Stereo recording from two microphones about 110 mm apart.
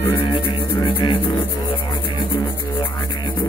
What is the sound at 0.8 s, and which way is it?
Music, 50° left (ahead or behind).